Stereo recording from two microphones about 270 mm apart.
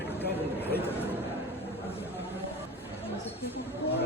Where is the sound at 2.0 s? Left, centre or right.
Centre.